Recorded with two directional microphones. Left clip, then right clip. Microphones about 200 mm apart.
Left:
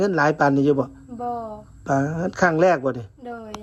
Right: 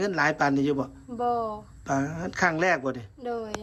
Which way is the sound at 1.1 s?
25° right (ahead or behind).